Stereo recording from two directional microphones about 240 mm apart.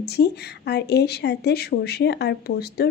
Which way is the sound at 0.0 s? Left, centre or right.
Left.